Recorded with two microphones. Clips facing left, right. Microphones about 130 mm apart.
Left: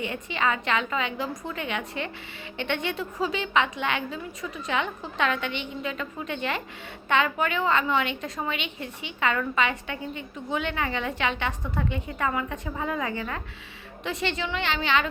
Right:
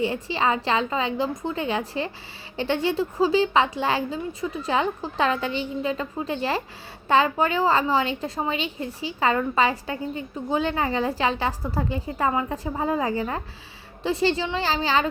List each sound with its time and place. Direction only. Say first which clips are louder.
0.0 s a woman's voice: right 4 dB; 30° right (ahead or behind)